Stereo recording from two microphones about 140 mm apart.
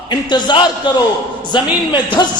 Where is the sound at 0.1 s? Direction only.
30° left (ahead or behind).